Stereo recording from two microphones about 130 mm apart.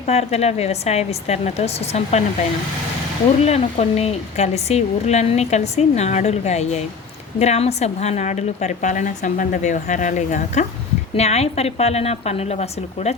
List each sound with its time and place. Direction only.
0.0 s speech: 55° left (ahead or behind)
3.4 s a woman's voice: 55° left (ahead or behind)
11.1 s speech: 55° left (ahead or behind)